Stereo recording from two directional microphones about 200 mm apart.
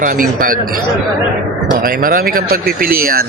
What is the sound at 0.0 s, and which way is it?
Speech, 45° right (ahead or behind).